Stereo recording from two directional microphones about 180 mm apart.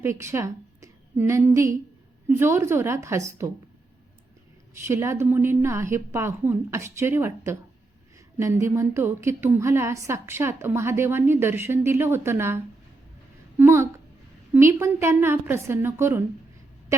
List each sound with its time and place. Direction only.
0.0 s a woman's voice: 15° right (ahead or behind)
4.9 s a woman's voice: 15° right (ahead or behind)